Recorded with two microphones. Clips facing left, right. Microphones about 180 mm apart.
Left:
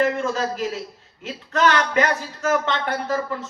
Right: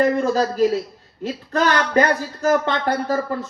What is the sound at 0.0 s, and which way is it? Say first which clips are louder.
A man's voice: right 4 dB; 35° right (ahead or behind).